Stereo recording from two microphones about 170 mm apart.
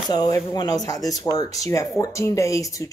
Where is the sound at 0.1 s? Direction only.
20° left (ahead or behind).